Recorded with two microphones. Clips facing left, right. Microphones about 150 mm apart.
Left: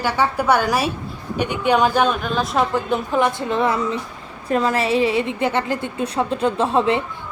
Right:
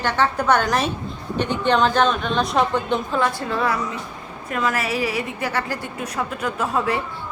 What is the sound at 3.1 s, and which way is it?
A woman's voice, 20° left (ahead or behind).